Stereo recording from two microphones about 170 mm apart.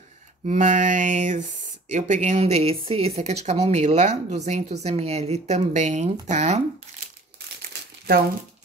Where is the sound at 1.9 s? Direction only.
45° right (ahead or behind).